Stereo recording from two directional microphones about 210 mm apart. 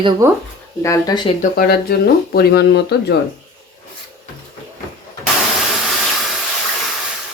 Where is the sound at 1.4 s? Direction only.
45° left (ahead or behind).